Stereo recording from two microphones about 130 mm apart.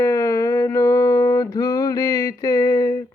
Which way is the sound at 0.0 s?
25° left (ahead or behind).